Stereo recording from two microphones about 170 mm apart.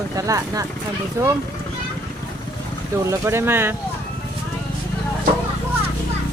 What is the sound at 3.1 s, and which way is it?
Speech, 15° right (ahead or behind).